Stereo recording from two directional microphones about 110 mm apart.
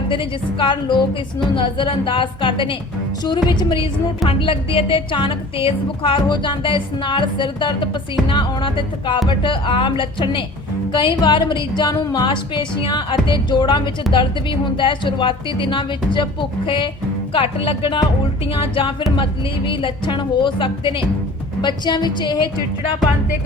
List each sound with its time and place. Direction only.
0.1 s a woman's voice: 50° left (ahead or behind)
4.3 s a woman's voice: 55° left (ahead or behind)